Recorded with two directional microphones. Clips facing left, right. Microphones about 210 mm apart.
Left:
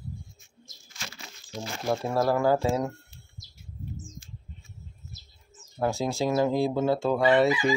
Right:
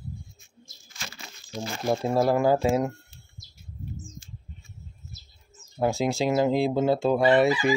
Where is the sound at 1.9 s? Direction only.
20° right (ahead or behind).